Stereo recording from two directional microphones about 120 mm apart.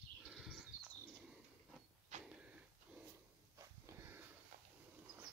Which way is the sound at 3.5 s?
25° right (ahead or behind).